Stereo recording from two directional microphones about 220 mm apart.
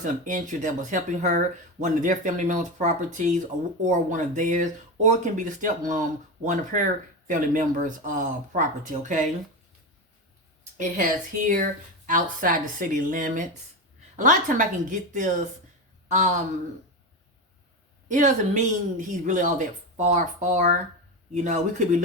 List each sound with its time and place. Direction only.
0.0 s speech: 35° right (ahead or behind)
11.4 s speech: 35° right (ahead or behind)
18.1 s speech: 35° right (ahead or behind)